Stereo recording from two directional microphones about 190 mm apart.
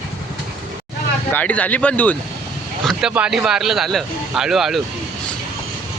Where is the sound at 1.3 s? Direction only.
10° left (ahead or behind).